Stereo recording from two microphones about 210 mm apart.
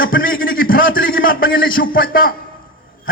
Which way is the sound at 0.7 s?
65° left (ahead or behind).